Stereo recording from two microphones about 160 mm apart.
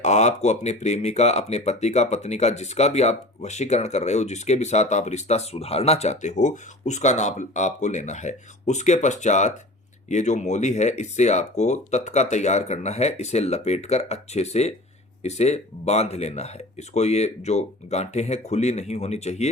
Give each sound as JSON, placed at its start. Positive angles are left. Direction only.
{"t": 0.0, "sound": "speech", "side_deg": 45}